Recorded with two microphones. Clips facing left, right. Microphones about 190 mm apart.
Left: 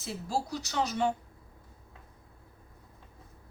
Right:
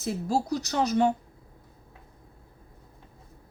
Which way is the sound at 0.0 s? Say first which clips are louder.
Right 6 dB; 40° right (ahead or behind).